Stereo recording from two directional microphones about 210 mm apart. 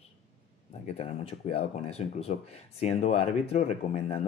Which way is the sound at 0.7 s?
30° left (ahead or behind).